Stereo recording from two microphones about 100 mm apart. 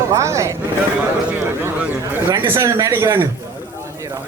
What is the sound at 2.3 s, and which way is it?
A man's voice, 30° right (ahead or behind).